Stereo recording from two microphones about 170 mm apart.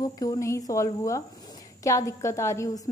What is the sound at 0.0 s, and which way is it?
A woman's voice, 20° left (ahead or behind).